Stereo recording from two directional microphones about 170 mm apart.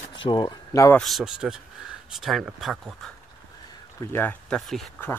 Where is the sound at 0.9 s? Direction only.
Centre (ahead or behind).